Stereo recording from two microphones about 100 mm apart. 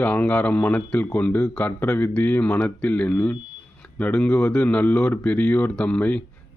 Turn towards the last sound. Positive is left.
turn(degrees=15)  # may be behind; listen again after turning